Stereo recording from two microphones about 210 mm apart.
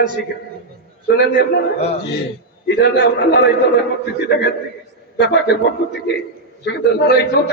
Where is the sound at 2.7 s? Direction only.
55° left (ahead or behind).